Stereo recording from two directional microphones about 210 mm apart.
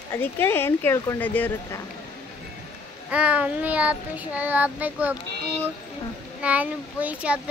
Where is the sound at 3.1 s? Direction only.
5° right (ahead or behind).